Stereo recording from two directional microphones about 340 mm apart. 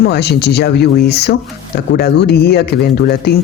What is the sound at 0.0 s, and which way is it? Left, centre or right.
Speech, left.